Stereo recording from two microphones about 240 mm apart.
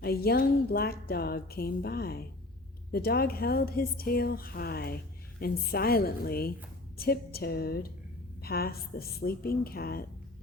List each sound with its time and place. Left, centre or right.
0.0 s speech: left